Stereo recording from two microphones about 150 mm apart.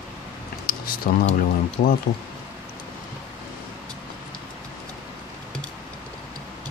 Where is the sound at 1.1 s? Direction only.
70° left (ahead or behind).